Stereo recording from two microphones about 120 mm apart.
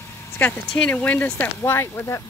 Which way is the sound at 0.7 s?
10° left (ahead or behind).